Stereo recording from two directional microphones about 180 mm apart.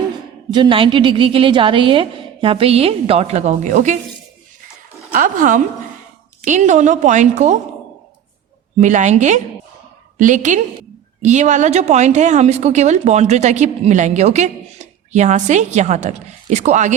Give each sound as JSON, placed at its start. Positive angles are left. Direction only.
{"t": 0.5, "sound": "a woman's voice", "side_deg": -25}
{"t": 5.1, "sound": "a woman's voice", "side_deg": -50}
{"t": 8.8, "sound": "a woman's voice", "side_deg": -40}